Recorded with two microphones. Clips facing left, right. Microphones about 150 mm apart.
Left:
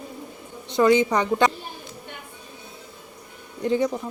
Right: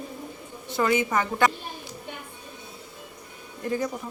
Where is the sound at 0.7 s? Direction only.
20° left (ahead or behind).